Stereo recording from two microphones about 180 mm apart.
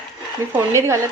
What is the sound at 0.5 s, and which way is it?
Speech, 15° right (ahead or behind).